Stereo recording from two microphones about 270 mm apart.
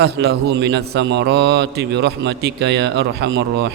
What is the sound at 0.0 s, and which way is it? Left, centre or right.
Speech, right.